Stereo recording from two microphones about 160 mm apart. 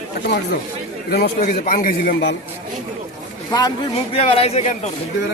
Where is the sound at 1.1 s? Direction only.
85° left.